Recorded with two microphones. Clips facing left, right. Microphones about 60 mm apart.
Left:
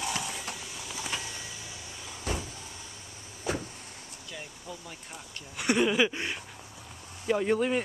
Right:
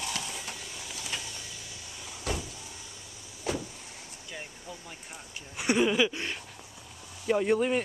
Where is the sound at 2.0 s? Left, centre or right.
Left.